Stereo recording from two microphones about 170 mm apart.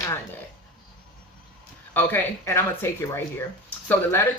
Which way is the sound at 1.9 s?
10° left (ahead or behind).